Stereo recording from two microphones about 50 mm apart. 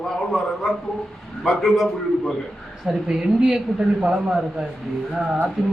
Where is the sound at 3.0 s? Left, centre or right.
Centre.